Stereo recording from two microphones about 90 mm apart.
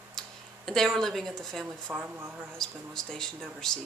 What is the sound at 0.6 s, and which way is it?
Speech, 5° left (ahead or behind).